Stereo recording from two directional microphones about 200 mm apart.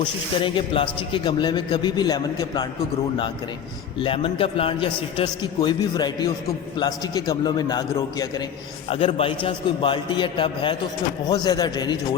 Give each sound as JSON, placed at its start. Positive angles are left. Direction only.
{"t": 0.4, "sound": "a man's voice", "side_deg": 25}
{"t": 3.9, "sound": "a man's voice", "side_deg": 25}